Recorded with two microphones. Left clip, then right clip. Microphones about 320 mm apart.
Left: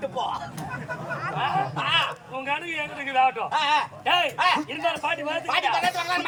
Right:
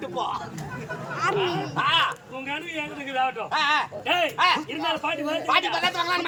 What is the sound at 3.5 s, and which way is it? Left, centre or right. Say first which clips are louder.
Speech: even; centre.